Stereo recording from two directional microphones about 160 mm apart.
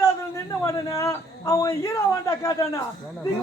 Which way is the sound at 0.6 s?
20° left (ahead or behind).